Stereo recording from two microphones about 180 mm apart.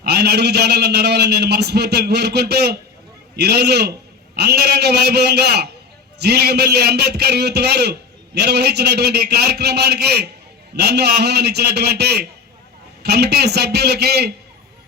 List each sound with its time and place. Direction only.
0.0 s a man's voice: 65° right (ahead or behind)